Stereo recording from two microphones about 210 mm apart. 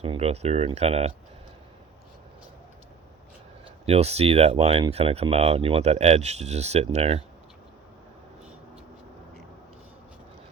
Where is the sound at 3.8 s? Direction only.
30° right (ahead or behind).